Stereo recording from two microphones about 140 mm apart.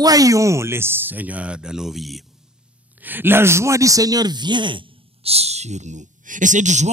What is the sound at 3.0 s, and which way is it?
Speech, 15° right (ahead or behind).